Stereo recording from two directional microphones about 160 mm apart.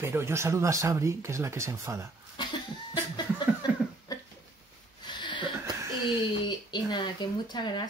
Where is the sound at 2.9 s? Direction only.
25° left (ahead or behind).